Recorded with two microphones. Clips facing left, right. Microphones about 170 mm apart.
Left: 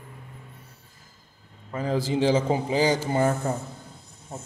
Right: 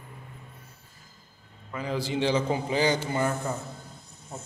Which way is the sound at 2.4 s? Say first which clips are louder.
Left 3 dB; 25° left (ahead or behind).